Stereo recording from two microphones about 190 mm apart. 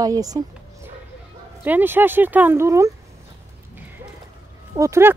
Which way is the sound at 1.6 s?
10° right (ahead or behind).